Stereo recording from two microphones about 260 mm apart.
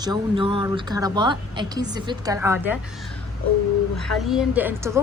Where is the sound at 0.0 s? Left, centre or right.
Centre.